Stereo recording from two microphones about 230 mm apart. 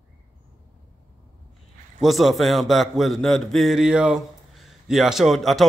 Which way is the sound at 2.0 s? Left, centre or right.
Centre.